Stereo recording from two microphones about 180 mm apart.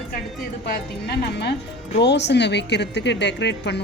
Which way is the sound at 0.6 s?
65° left (ahead or behind).